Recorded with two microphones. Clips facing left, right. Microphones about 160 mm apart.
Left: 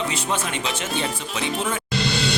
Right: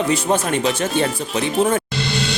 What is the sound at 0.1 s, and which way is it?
Speech, 45° right (ahead or behind).